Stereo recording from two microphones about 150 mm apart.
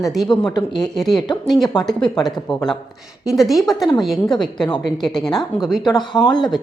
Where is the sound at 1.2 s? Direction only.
30° left (ahead or behind).